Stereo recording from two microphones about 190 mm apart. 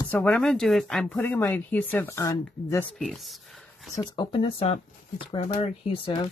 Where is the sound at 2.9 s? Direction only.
Centre (ahead or behind).